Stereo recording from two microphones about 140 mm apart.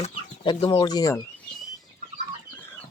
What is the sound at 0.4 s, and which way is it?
Speech, 35° left (ahead or behind).